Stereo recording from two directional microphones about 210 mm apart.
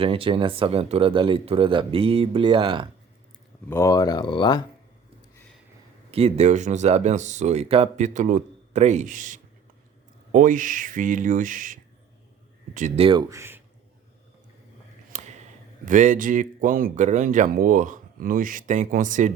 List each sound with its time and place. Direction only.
0.0 s speech: 25° right (ahead or behind)
3.7 s speech: 15° left (ahead or behind)
6.1 s speech: 30° right (ahead or behind)
13.1 s speech: 20° right (ahead or behind)
15.1 s a sound: 35° right (ahead or behind)
15.9 s speech: 40° right (ahead or behind)